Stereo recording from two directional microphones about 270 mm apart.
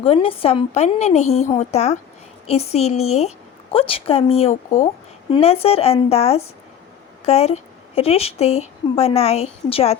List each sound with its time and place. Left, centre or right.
0.0 s a woman's voice: left